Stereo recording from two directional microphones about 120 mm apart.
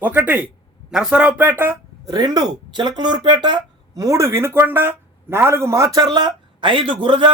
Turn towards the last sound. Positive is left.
turn(degrees=-45)  # may be behind; listen again after turning